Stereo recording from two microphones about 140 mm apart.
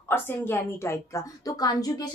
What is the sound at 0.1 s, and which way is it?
A woman's voice, 15° left (ahead or behind).